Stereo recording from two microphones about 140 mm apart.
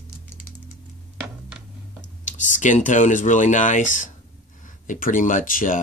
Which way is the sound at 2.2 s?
65° left (ahead or behind).